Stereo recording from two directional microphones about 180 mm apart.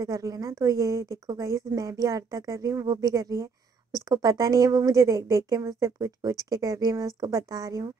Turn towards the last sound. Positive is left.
turn(degrees=-20)  # may be behind; listen again after turning